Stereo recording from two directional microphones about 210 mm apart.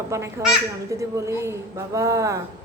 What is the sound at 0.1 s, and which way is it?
A woman's voice, 15° right (ahead or behind).